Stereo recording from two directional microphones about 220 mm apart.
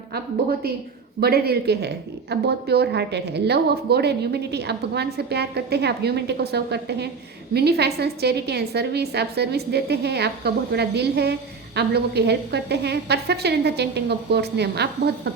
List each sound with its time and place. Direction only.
1.2 s a woman's voice: 45° right (ahead or behind)